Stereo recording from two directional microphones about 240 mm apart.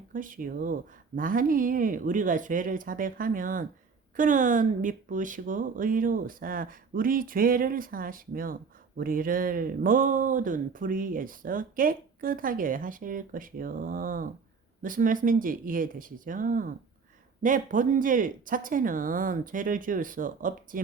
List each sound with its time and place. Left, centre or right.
0.1 s speech: right